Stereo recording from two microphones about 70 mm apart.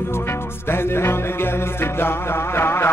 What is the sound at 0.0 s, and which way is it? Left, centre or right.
Music, left.